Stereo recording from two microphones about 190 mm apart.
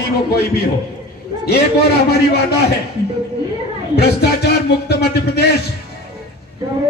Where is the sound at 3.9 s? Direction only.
55° left (ahead or behind).